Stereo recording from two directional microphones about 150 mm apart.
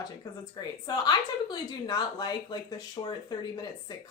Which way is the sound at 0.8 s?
25° left (ahead or behind).